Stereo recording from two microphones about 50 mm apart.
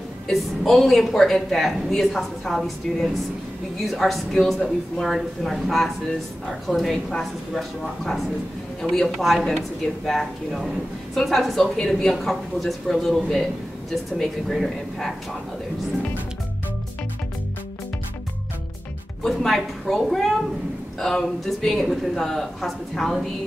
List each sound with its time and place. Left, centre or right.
0.3 s a woman's voice: centre
19.2 s a woman's voice: centre